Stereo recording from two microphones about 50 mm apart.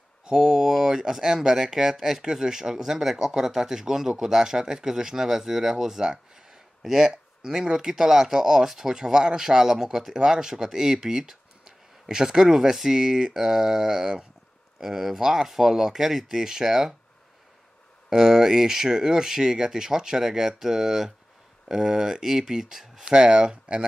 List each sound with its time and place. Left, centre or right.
0.2 s speech: centre
18.1 s speech: centre